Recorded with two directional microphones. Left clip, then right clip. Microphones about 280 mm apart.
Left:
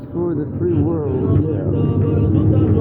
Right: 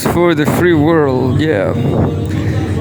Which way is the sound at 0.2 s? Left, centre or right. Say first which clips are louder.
Right 8 dB; right.